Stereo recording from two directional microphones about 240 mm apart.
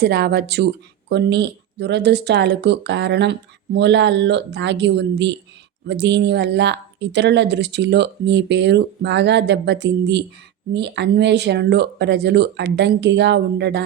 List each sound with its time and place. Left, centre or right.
0.0 s speech: right